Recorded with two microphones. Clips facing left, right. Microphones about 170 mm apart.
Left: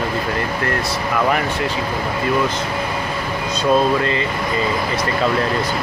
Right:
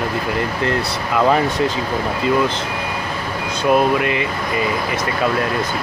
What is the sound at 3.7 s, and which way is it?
Speech, 15° right (ahead or behind).